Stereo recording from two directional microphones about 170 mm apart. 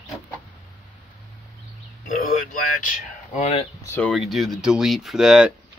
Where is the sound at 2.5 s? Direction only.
45° left (ahead or behind).